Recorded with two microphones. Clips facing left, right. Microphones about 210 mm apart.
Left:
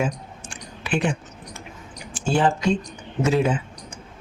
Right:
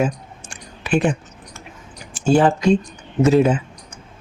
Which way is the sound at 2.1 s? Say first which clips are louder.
Right 6 dB; 40° right (ahead or behind).